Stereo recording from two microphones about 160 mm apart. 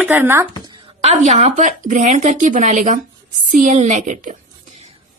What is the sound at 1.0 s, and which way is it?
Speech, 45° right (ahead or behind).